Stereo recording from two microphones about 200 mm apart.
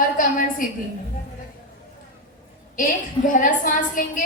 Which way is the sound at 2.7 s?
40° left (ahead or behind).